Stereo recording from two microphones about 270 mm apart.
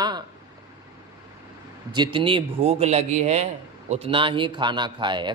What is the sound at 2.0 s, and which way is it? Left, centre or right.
A man's voice, centre.